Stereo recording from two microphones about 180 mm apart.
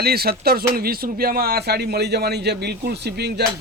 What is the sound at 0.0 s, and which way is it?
A man's voice, 60° right (ahead or behind).